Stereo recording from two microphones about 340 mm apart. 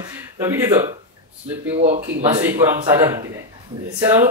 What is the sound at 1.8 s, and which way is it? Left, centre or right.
Speech, right.